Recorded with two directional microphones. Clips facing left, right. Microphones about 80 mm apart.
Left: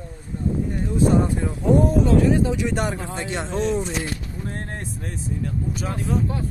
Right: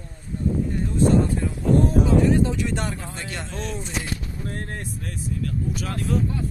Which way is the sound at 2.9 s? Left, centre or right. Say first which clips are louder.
Left 5 dB; centre.